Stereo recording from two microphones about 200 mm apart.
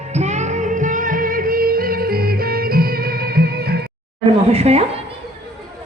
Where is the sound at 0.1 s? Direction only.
35° right (ahead or behind); by 3.8 s 50° right (ahead or behind).